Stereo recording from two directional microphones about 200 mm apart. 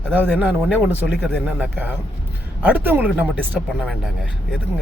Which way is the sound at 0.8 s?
5° right (ahead or behind).